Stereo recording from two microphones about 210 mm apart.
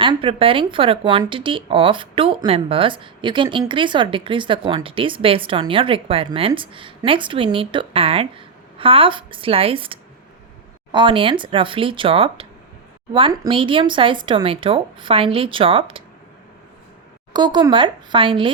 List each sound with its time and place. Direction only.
0.0 s speech: 25° right (ahead or behind)
17.3 s speech: 20° right (ahead or behind)